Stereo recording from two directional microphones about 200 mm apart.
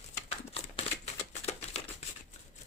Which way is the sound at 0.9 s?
30° left (ahead or behind).